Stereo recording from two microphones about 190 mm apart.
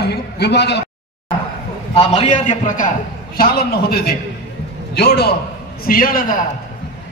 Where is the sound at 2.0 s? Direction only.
35° left (ahead or behind).